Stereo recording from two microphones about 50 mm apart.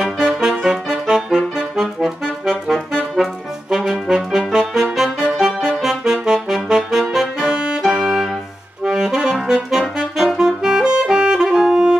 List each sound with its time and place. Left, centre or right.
0.3 s clarinet: centre
3.7 s brass instrument: centre
4.9 s music: centre
6.1 s saxophone: centre
7.5 s music: right
7.8 s music: centre
8.8 s saxophone: centre